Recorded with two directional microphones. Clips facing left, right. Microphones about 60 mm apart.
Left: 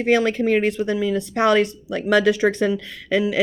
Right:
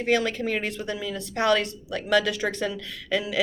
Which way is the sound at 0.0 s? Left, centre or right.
Left.